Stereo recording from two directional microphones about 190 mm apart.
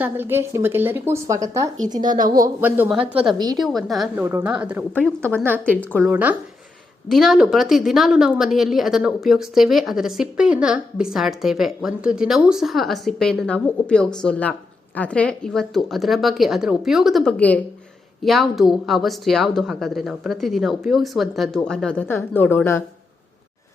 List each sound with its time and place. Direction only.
0.0 s speech: 10° right (ahead or behind)
2.0 s a woman's voice: 45° right (ahead or behind)
2.6 s speech: 10° right (ahead or behind)
3.3 s a woman's voice: 20° right (ahead or behind)
3.6 s a woman's voice: centre (ahead or behind)
4.2 s a woman's voice: 15° right (ahead or behind); by 22.8 s 10° left (ahead or behind)